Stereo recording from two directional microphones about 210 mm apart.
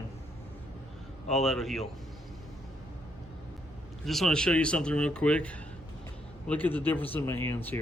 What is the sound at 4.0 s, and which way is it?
Speech, centre (ahead or behind).